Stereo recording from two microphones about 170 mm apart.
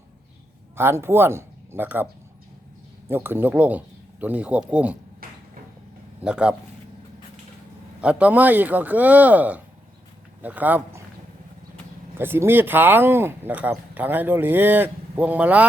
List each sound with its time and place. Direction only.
0.8 s speech: 15° right (ahead or behind)
3.1 s speech: 10° right (ahead or behind)
5.2 s a sound: 60° right (ahead or behind)
6.2 s speech: 5° right (ahead or behind)
8.0 s speech: 10° right (ahead or behind)
12.1 s speech: 15° right (ahead or behind)